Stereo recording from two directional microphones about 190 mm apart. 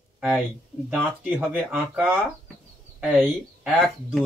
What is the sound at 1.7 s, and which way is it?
Speech, 10° right (ahead or behind).